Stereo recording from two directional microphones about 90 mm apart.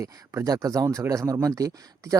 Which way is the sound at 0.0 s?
35° right (ahead or behind).